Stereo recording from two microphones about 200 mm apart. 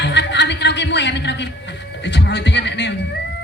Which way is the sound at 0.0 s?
60° left (ahead or behind).